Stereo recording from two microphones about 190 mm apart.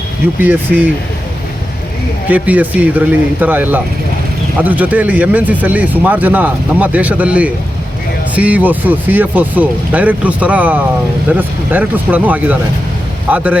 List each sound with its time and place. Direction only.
0.3 s speech: 10° right (ahead or behind)
2.3 s speech: 10° right (ahead or behind)